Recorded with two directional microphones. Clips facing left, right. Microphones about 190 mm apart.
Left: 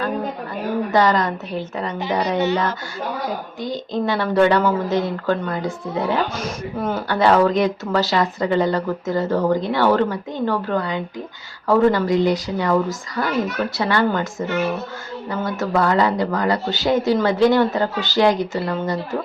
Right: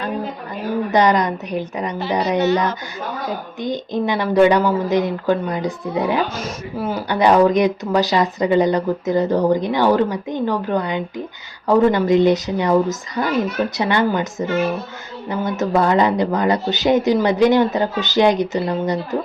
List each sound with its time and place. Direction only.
0.9 s speech: 20° right (ahead or behind)
3.6 s speech: 20° right (ahead or behind)
6.3 s speech: centre (ahead or behind)
7.1 s speech: 15° right (ahead or behind)